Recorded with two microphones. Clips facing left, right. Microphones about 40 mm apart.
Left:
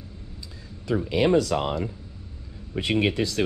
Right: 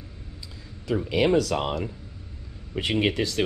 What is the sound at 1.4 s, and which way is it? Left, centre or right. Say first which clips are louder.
Speech: left 1 dB; right.